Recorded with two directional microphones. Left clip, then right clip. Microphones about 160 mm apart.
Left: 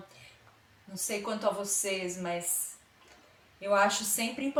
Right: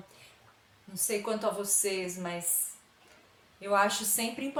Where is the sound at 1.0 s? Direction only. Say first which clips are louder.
Even; 20° right (ahead or behind).